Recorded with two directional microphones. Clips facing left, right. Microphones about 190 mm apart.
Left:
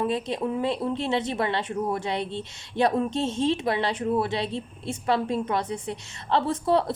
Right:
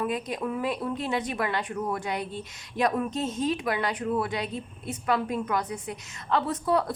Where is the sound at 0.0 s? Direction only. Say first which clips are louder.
Left 3 dB; 25° left (ahead or behind).